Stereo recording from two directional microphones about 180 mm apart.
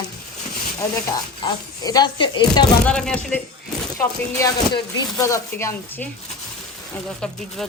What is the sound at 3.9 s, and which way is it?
Speech, 20° left (ahead or behind).